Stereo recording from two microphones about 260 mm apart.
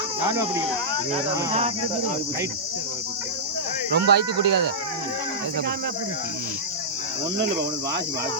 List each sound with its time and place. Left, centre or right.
3.9 s speech: right